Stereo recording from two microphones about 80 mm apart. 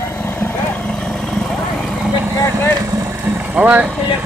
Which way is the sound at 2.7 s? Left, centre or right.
Right.